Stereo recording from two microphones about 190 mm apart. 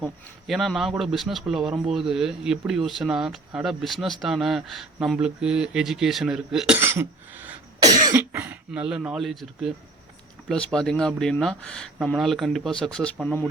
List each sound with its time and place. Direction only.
0.0 s speech: centre (ahead or behind)